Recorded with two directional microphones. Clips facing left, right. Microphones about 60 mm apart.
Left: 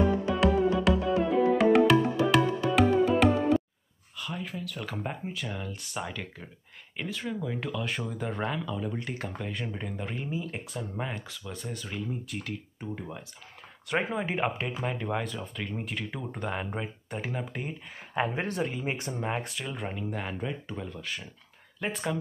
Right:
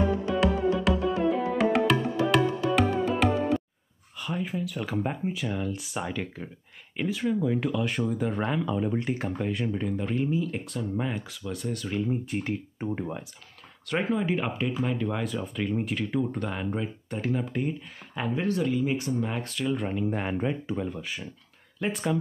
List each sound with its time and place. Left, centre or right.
0.0 s music: centre
4.2 s speech: centre
8.6 s speech: right
9.5 s speech: centre
12.1 s speech: right
13.8 s speech: centre
15.2 s speech: centre
16.3 s speech: centre
18.1 s speech: left
19.6 s speech: centre
20.1 s speech: centre
21.7 s speech: centre